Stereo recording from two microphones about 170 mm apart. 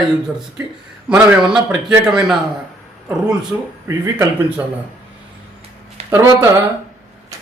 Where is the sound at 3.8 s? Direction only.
15° right (ahead or behind).